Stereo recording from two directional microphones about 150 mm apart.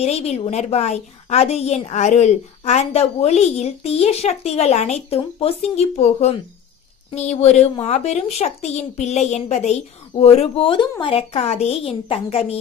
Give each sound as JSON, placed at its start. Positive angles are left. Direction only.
{"t": 0.0, "sound": "a woman's voice", "side_deg": 45}